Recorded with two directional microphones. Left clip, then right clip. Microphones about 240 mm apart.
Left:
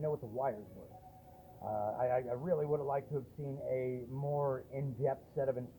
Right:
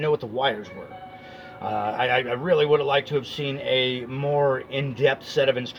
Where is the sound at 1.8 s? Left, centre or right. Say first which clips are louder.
Right 11 dB; right.